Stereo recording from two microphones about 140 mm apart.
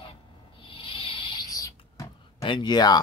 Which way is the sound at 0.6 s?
35° left (ahead or behind).